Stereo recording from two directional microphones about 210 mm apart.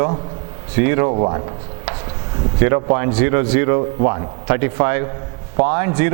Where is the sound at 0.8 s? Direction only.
15° right (ahead or behind).